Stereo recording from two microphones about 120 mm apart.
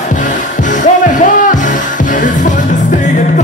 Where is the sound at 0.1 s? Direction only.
90° left.